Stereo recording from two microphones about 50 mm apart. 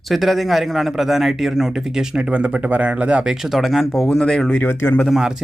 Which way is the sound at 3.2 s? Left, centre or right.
Centre.